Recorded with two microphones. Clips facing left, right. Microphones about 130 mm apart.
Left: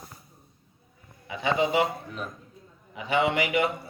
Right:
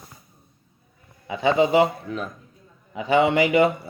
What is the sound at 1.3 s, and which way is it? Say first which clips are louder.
Speech: right 6 dB; 30° right (ahead or behind).